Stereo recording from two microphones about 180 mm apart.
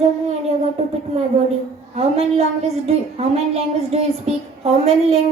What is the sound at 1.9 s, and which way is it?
A child's voice, 35° right (ahead or behind).